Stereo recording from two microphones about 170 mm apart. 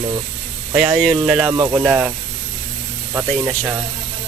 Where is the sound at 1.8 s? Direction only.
5° right (ahead or behind).